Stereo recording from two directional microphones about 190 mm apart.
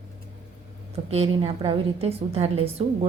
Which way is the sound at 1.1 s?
30° right (ahead or behind).